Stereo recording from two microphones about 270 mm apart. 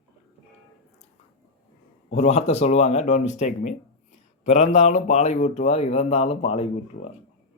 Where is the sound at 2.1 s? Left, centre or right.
Left.